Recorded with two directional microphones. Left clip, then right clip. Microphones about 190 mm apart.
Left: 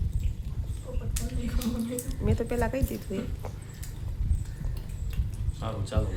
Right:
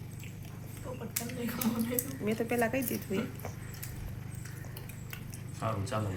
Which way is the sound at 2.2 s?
15° left (ahead or behind).